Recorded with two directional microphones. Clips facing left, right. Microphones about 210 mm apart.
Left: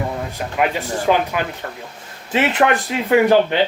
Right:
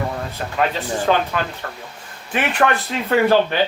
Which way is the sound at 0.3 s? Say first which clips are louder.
Left 1 dB; 15° left (ahead or behind).